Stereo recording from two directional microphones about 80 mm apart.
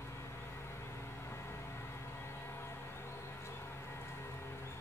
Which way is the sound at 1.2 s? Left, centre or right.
Left.